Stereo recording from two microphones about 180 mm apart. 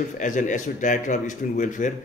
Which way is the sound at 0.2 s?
45° left (ahead or behind).